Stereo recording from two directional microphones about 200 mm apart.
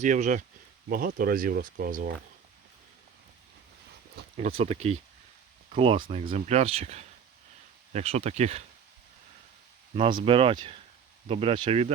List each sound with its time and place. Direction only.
0.0 s speech: 40° right (ahead or behind)
4.4 s speech: 30° right (ahead or behind)
6.0 s speech: 40° right (ahead or behind)
9.9 s speech: 25° right (ahead or behind)